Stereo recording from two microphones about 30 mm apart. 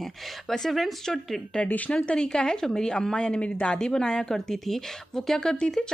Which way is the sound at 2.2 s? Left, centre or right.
Left.